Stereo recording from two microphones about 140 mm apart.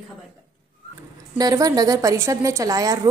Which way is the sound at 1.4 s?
25° right (ahead or behind).